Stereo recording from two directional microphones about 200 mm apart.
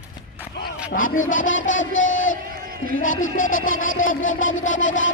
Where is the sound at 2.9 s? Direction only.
80° left.